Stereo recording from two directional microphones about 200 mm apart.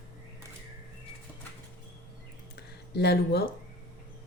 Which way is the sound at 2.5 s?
55° left (ahead or behind).